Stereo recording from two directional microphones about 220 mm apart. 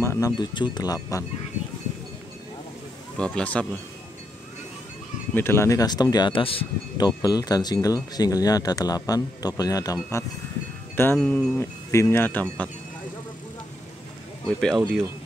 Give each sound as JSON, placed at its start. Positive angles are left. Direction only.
{"t": 0.0, "sound": "speech", "side_deg": 15}
{"t": 3.2, "sound": "speech", "side_deg": 5}
{"t": 5.3, "sound": "speech", "side_deg": 10}
{"t": 11.0, "sound": "speech", "side_deg": 10}
{"t": 14.6, "sound": "speech", "side_deg": 0}